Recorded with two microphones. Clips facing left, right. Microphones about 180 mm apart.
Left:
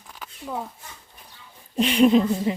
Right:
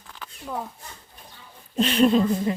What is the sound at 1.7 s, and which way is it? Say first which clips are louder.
Speech: left 2 dB; 15° left (ahead or behind).